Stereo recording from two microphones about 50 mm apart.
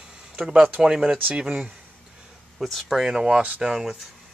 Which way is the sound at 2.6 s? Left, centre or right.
Centre.